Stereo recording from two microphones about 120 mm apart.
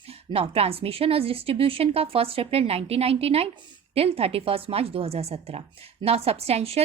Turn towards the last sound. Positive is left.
turn(degrees=-60)  # may be behind; listen again after turning